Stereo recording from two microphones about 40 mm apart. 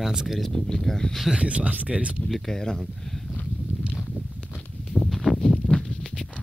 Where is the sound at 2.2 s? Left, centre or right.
Centre.